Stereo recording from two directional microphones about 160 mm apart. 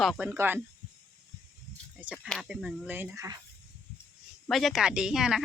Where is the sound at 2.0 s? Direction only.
10° right (ahead or behind).